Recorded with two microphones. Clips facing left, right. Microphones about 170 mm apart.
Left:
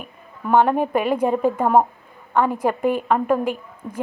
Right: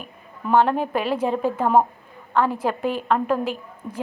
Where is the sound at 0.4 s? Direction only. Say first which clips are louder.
Left 2 dB; 10° left (ahead or behind).